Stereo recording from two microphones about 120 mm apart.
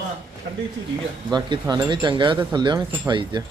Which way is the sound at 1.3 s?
35° right (ahead or behind).